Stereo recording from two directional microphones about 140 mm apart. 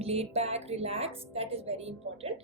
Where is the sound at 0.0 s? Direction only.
45° right (ahead or behind).